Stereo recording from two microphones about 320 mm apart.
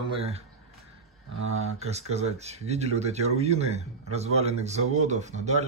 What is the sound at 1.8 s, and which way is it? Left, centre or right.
Speech, centre.